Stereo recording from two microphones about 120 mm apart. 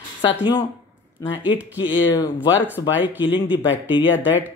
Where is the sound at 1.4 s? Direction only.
15° right (ahead or behind).